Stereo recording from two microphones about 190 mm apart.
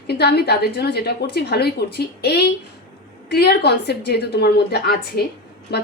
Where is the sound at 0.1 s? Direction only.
60° left (ahead or behind).